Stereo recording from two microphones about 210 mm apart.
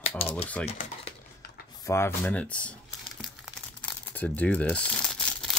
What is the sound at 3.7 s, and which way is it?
Crumpling, 5° left (ahead or behind).